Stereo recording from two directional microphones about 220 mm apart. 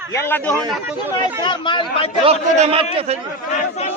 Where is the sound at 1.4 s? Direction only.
20° left (ahead or behind).